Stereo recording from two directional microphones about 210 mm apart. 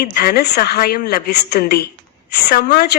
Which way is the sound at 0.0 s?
45° left (ahead or behind).